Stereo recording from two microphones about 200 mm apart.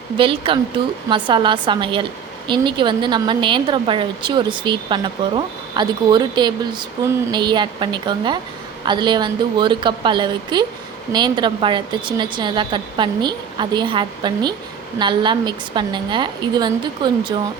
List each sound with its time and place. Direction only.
0.2 s a woman's voice: 25° right (ahead or behind)